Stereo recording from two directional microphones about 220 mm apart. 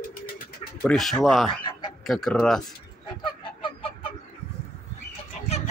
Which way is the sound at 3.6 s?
25° left (ahead or behind).